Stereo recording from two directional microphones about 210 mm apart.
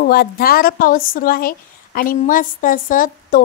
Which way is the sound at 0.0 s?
45° left (ahead or behind).